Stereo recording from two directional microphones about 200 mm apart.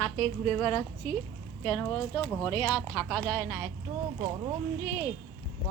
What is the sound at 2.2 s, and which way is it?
Speech, 15° left (ahead or behind).